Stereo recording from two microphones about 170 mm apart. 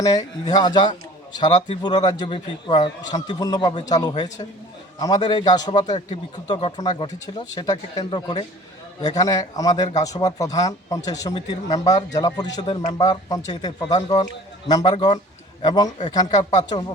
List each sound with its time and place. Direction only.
0.0 s speech: 20° left (ahead or behind)